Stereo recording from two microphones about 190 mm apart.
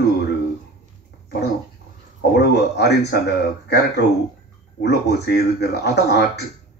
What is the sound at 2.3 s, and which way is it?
A man's voice, 60° left (ahead or behind).